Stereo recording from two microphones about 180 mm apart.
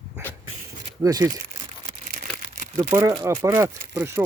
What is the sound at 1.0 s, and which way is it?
Speech, 20° right (ahead or behind).